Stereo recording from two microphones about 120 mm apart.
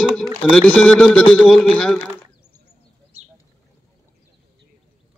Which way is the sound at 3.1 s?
60° right (ahead or behind).